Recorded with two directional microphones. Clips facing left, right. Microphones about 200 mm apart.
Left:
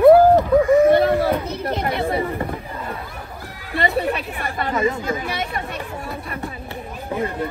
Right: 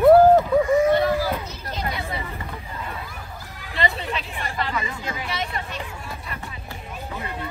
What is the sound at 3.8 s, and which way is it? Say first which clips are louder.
Speech: left 6 dB; 55° left (ahead or behind).